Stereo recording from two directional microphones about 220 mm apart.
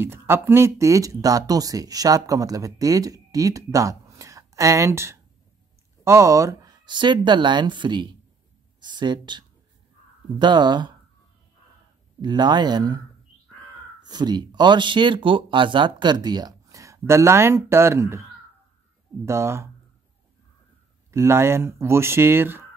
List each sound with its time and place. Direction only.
0.0 s speech: 10° right (ahead or behind)
10.4 s speech: 20° right (ahead or behind)
12.2 s speech: 20° right (ahead or behind)
14.0 s speech: 20° right (ahead or behind)
19.2 s speech: 10° right (ahead or behind)
21.1 s speech: 10° right (ahead or behind)